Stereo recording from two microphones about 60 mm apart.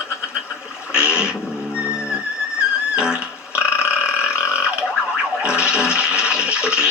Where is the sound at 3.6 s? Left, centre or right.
Centre.